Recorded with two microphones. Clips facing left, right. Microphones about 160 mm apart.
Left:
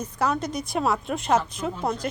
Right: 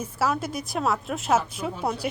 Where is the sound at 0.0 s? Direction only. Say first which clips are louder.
Left 1 dB; 5° right (ahead or behind).